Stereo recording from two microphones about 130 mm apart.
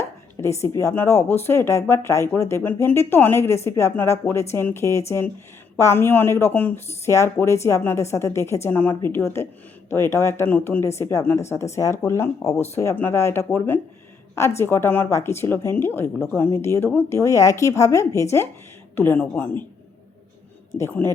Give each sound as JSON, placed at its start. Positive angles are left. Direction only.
{"t": 0.4, "sound": "a woman's voice", "side_deg": 20}
{"t": 20.7, "sound": "a woman's voice", "side_deg": 20}